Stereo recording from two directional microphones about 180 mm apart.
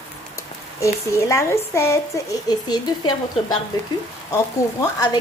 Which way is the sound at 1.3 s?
15° left (ahead or behind).